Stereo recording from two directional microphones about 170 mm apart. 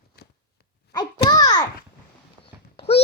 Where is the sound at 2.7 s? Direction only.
35° left (ahead or behind).